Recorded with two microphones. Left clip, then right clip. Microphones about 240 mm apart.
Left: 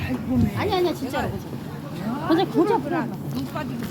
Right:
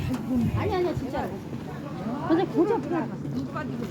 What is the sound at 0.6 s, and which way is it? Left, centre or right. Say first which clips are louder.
Speech: left 5 dB; left.